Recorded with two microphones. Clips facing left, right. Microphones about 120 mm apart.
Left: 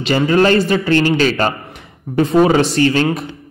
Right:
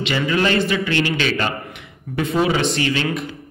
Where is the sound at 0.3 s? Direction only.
40° left (ahead or behind).